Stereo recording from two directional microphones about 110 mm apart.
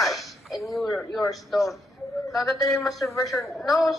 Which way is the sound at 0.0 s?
Centre (ahead or behind).